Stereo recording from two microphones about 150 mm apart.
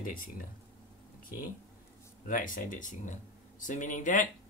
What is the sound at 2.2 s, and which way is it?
Speech, 65° left (ahead or behind).